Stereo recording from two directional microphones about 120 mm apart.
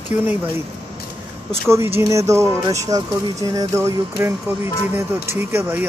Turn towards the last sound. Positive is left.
turn(degrees=-20)  # may be behind; listen again after turning